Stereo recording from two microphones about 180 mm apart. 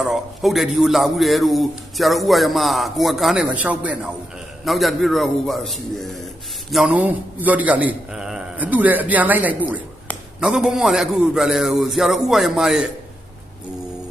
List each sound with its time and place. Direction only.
0.0 s a man's voice: centre (ahead or behind)